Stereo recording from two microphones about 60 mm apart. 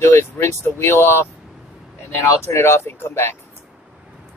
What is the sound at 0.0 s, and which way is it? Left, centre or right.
Speech, left.